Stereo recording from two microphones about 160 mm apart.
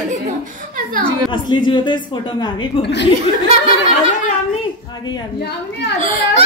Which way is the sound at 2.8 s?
90° left.